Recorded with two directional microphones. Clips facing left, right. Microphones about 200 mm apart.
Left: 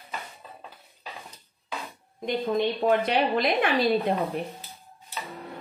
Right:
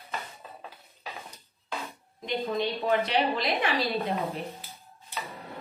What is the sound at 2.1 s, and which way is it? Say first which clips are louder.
A woman's voice: left 4 dB; 50° left (ahead or behind).